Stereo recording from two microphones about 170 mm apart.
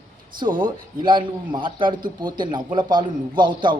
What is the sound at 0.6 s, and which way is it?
Speech, 25° right (ahead or behind).